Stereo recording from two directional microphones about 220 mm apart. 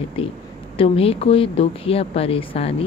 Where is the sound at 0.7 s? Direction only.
25° left (ahead or behind).